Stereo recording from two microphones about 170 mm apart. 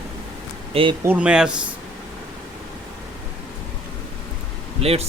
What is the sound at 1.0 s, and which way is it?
Speech, 10° right (ahead or behind).